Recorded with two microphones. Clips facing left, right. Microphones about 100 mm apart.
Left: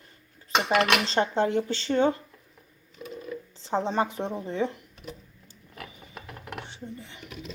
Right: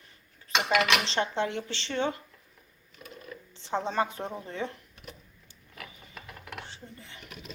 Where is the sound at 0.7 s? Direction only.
45° left (ahead or behind).